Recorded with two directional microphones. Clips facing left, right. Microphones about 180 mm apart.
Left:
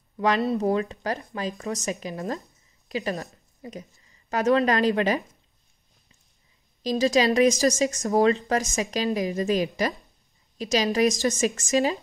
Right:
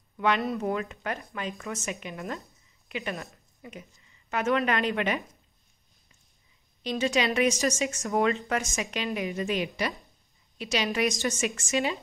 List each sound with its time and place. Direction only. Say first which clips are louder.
0.2 s a woman's voice: left 4 dB; 35° left (ahead or behind)
6.8 s speech: left 5 dB; 40° left (ahead or behind)